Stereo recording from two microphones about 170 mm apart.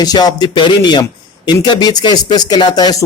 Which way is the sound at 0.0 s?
25° left (ahead or behind).